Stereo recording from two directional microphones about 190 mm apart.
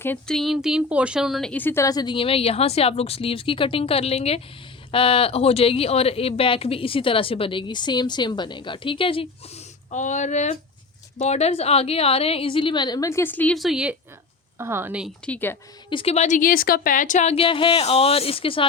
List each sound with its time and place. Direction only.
0.0 s speech: 5° left (ahead or behind); by 9.6 s 30° left (ahead or behind)
9.9 s a woman's voice: 40° left (ahead or behind); by 15.1 s 10° right (ahead or behind)
15.3 s speech: 10° left (ahead or behind)
15.9 s a woman's voice: 30° left (ahead or behind)